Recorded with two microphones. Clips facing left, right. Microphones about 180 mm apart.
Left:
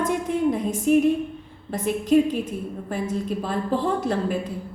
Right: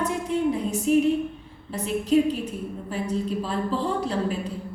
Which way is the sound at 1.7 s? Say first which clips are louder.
Left 2 dB; 50° left (ahead or behind).